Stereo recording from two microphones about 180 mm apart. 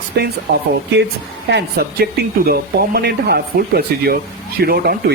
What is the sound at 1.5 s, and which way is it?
Speech, 65° right (ahead or behind).